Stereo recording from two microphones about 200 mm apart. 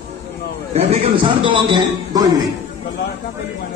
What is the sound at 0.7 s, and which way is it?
A man's voice, 30° right (ahead or behind).